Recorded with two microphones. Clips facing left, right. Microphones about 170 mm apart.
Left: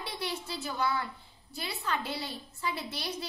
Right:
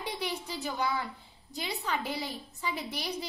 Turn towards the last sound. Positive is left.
turn(degrees=-15)  # may be behind; listen again after turning